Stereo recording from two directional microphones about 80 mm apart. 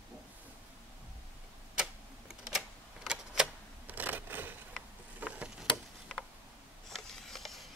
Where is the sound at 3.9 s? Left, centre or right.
Right.